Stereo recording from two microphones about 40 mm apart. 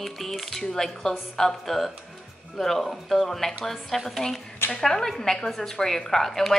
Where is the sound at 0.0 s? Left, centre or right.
Centre.